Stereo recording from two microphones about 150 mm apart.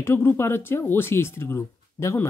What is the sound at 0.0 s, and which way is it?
Speech, 15° left (ahead or behind).